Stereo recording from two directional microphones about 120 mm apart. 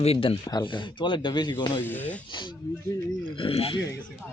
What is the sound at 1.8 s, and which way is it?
Speech, 15° left (ahead or behind).